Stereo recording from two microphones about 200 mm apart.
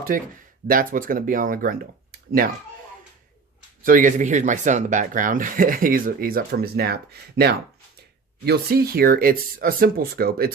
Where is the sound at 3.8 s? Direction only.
40° right (ahead or behind).